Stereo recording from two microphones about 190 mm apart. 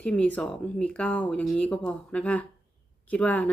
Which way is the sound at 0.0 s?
5° left (ahead or behind).